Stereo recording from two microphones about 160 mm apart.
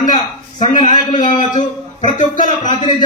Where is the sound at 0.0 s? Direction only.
25° left (ahead or behind).